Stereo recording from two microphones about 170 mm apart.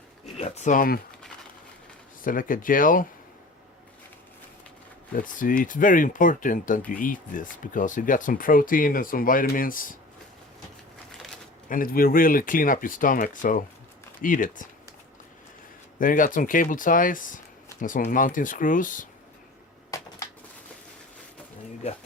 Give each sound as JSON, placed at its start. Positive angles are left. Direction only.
{"t": 0.3, "sound": "speech", "side_deg": 40}
{"t": 2.2, "sound": "speech", "side_deg": 55}
{"t": 5.1, "sound": "speech", "side_deg": 50}
{"t": 11.7, "sound": "speech", "side_deg": 55}
{"t": 16.0, "sound": "speech", "side_deg": 55}
{"t": 19.9, "sound": "typewriter", "side_deg": 20}